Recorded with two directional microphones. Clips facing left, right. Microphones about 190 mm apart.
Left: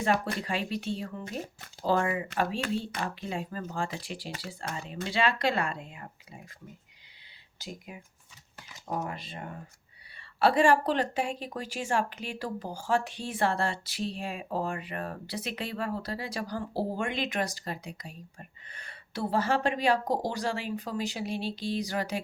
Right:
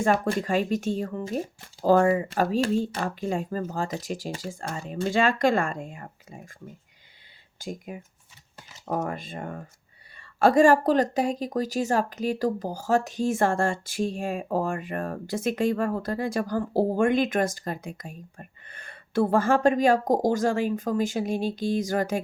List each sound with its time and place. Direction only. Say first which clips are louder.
0.3 s speech: right 8 dB; 45° right (ahead or behind)
7.6 s speech: right 7 dB; 45° right (ahead or behind)